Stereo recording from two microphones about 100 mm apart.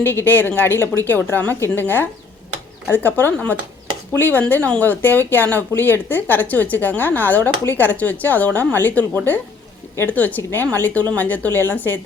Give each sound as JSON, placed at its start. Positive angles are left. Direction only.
{"t": 0.0, "sound": "a woman's voice", "side_deg": 20}